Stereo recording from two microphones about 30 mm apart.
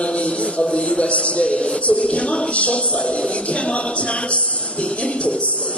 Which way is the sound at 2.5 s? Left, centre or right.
Left.